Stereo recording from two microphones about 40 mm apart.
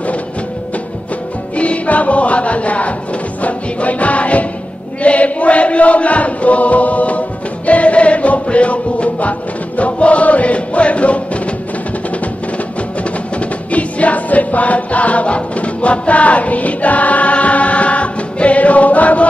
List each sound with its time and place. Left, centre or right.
1.6 s music: left
5.0 s chant: left
9.8 s music: left
13.7 s music: left